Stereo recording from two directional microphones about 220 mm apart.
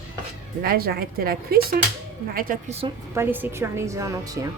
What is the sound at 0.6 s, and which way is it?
A woman's voice, 45° right (ahead or behind).